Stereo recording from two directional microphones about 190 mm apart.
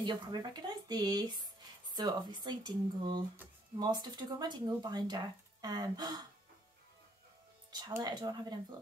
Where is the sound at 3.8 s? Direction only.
20° right (ahead or behind).